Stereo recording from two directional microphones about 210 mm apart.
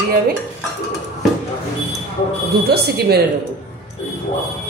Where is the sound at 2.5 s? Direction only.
50° right (ahead or behind).